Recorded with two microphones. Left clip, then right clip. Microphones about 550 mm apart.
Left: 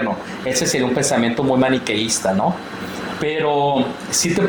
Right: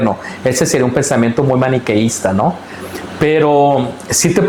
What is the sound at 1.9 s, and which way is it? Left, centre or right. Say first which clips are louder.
Speech: right 4 dB; right.